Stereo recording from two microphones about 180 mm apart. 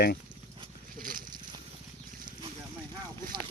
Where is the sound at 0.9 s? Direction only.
50° right (ahead or behind).